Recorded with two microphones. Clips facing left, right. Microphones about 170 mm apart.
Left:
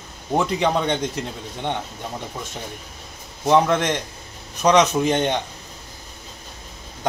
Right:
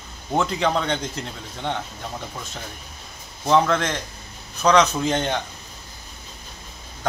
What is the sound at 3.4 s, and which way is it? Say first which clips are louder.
Speech: left 2 dB; 20° left (ahead or behind).